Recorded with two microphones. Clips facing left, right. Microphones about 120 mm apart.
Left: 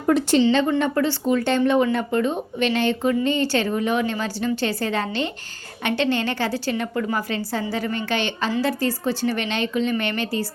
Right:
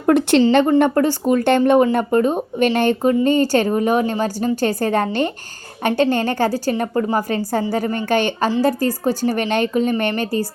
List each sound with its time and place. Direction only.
0.0 s speech: 55° right (ahead or behind)
0.8 s speech: 45° right (ahead or behind)